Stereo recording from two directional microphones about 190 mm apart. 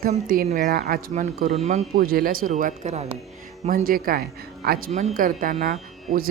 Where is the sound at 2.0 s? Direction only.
50° right (ahead or behind).